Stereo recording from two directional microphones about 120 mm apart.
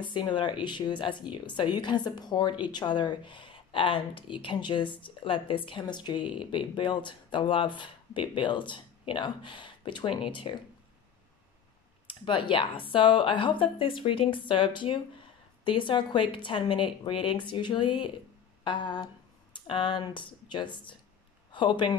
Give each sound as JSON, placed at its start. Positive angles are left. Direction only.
{"t": 0.0, "sound": "a woman's voice", "side_deg": 40}
{"t": 12.1, "sound": "a woman's voice", "side_deg": 45}